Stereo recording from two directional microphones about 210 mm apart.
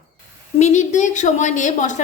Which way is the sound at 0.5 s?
35° left (ahead or behind).